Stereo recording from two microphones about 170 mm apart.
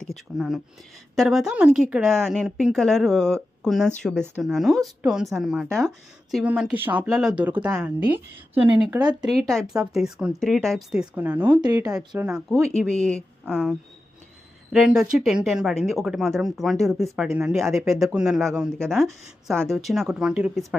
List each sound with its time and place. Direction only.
0.0 s a woman's voice: centre (ahead or behind)
9.2 s a woman's voice: centre (ahead or behind)
11.5 s speech: 25° right (ahead or behind)
11.9 s a woman's voice: 5° right (ahead or behind)